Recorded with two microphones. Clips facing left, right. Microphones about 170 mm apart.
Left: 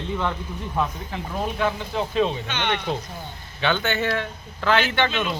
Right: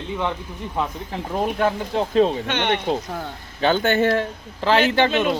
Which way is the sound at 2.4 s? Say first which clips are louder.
Right 5 dB; 65° right (ahead or behind).